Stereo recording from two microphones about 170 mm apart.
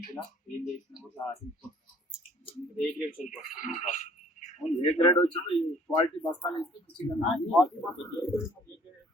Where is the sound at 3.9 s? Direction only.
45° left (ahead or behind).